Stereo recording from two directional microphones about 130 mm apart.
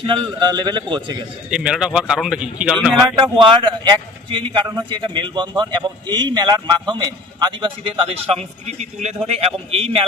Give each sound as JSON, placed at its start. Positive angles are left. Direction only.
{"t": 0.0, "sound": "a man's voice", "side_deg": -40}
{"t": 1.5, "sound": "speech", "side_deg": -5}
{"t": 3.3, "sound": "a man's voice", "side_deg": -40}